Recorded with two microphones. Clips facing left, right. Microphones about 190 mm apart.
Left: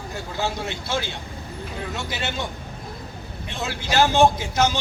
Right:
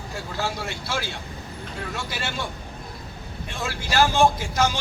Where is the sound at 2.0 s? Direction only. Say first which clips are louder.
Left 3 dB; 20° left (ahead or behind).